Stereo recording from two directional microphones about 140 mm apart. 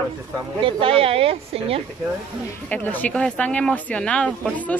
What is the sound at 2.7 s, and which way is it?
Speech, 10° left (ahead or behind).